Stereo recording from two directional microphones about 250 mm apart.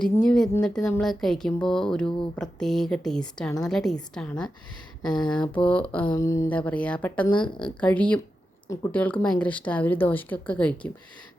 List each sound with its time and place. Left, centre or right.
0.0 s speech: centre
7.3 s speech: centre
7.6 s speech: centre